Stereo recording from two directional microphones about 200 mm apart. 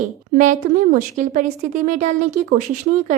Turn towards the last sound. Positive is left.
turn(degrees=-40)  # may be behind; listen again after turning